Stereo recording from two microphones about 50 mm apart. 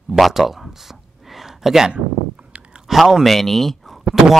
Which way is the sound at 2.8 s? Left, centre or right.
Centre.